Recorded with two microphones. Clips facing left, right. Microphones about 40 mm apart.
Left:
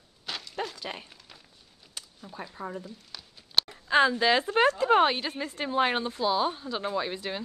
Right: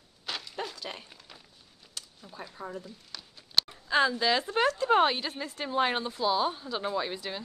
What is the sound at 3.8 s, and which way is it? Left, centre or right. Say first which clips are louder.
Speech: left 4 dB; centre.